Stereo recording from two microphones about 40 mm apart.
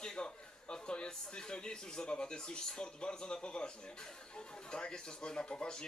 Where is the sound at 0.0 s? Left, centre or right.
Centre.